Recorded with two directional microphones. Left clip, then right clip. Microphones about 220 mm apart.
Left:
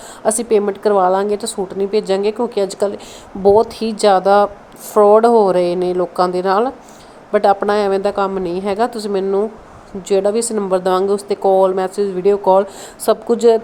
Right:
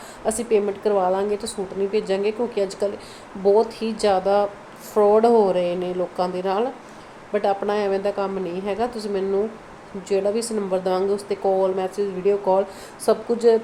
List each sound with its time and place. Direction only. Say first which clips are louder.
0.3 s a woman's voice: left 6 dB; 30° left (ahead or behind)